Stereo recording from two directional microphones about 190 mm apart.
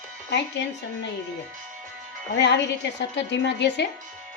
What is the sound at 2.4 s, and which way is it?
A woman's voice, 65° left (ahead or behind).